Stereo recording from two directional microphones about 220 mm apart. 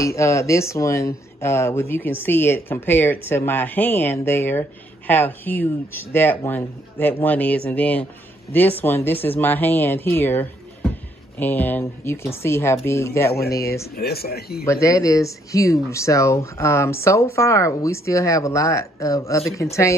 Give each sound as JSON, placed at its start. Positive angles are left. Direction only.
{"t": 0.0, "sound": "speech", "side_deg": 15}
{"t": 13.9, "sound": "speech", "side_deg": 45}
{"t": 14.7, "sound": "speech", "side_deg": 15}